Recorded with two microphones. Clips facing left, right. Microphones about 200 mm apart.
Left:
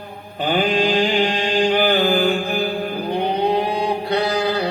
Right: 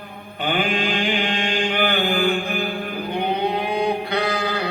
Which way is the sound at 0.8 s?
35° left (ahead or behind).